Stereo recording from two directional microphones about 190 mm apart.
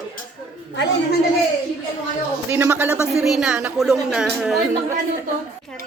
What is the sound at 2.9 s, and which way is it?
Speech, 15° left (ahead or behind).